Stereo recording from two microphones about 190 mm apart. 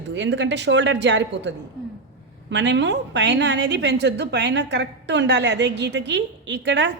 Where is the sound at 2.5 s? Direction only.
70° right (ahead or behind).